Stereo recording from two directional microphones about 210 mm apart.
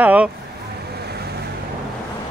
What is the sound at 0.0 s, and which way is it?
Speech, 5° right (ahead or behind).